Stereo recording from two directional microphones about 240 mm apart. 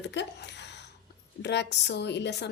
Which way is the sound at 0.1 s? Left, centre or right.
Left.